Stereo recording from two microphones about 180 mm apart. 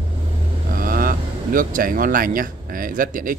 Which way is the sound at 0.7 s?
55° right (ahead or behind).